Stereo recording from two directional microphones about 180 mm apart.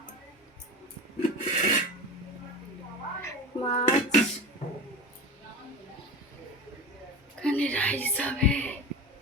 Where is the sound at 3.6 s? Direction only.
35° left (ahead or behind).